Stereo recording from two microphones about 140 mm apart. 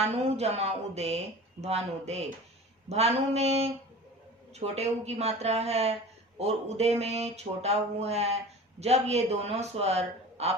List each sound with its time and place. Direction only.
0.0 s speech: 50° right (ahead or behind)